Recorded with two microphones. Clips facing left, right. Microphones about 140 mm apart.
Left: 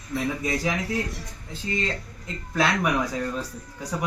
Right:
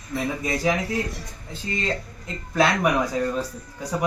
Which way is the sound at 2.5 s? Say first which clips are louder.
Right 3 dB; 10° right (ahead or behind).